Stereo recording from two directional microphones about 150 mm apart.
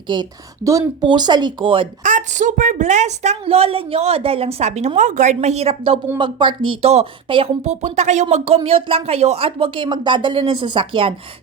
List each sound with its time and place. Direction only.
0.1 s speech: 25° right (ahead or behind)
2.0 s a woman's voice: 55° right (ahead or behind); by 6.0 s 40° right (ahead or behind)
6.1 s speech: 30° right (ahead or behind)
7.6 s speech: 50° right (ahead or behind)